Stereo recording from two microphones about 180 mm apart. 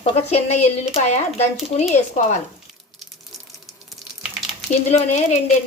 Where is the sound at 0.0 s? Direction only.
35° left (ahead or behind).